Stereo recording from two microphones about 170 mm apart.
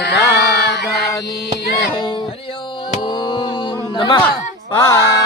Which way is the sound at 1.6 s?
65° left (ahead or behind).